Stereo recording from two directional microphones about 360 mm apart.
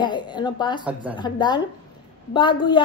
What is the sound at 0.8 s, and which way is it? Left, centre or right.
Speech, centre.